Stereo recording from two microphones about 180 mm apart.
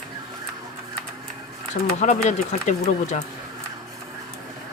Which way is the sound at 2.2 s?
40° left (ahead or behind).